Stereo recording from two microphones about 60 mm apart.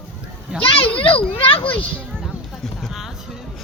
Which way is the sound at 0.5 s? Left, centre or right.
Centre.